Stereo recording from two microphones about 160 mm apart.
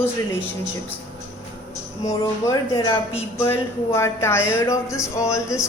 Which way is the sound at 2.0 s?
25° left (ahead or behind).